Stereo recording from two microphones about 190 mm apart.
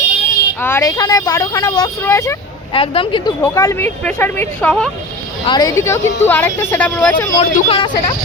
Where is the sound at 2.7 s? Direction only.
25° left (ahead or behind).